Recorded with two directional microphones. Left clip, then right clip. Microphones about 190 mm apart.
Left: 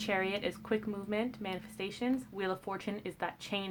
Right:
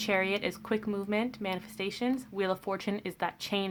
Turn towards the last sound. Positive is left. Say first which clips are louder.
# right 5 dB
turn(degrees=-35)  # may be behind; listen again after turning